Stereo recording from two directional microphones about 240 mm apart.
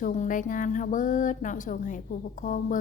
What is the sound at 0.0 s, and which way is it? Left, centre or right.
A woman's voice, left.